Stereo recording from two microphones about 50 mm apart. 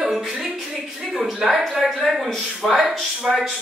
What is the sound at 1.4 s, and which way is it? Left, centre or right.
A man's voice, centre.